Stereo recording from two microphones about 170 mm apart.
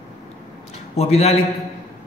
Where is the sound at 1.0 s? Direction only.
40° left (ahead or behind).